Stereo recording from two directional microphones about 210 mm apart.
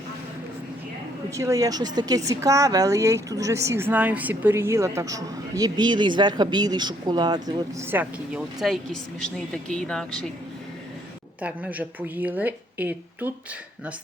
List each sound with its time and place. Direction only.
1.3 s speech: 15° right (ahead or behind); by 10.2 s 5° left (ahead or behind)
11.3 s speech: 5° right (ahead or behind)